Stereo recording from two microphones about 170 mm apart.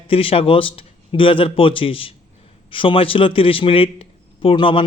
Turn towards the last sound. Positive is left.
turn(degrees=30)  # may be behind; listen again after turning